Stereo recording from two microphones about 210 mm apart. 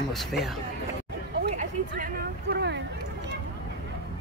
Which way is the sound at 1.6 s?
40° right (ahead or behind).